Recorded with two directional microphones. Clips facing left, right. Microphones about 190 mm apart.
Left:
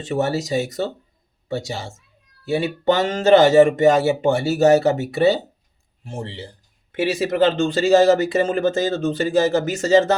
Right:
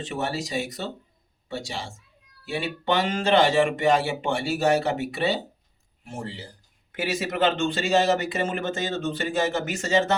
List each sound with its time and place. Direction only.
0.0 s speech: 40° left (ahead or behind)
6.1 s speech: 30° left (ahead or behind)